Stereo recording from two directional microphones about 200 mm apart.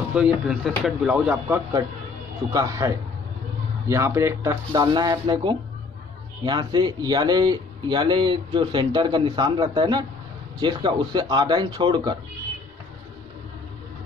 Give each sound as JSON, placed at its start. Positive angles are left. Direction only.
{"t": 0.1, "sound": "speech", "side_deg": -5}
{"t": 2.5, "sound": "speech", "side_deg": -20}
{"t": 3.9, "sound": "speech", "side_deg": -15}